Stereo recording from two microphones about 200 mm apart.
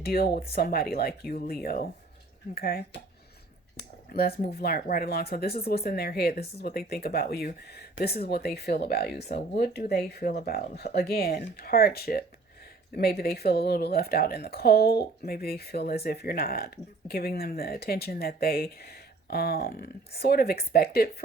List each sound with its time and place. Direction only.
0.0 s speech: 50° left (ahead or behind)